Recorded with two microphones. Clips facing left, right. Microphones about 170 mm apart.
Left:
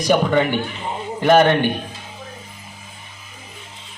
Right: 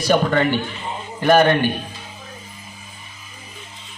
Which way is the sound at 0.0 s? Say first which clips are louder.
Left 1 dB; 15° left (ahead or behind).